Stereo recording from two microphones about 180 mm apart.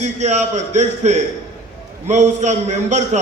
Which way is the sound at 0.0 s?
40° right (ahead or behind).